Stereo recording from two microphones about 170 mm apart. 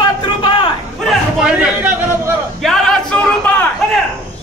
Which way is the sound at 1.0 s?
5° right (ahead or behind).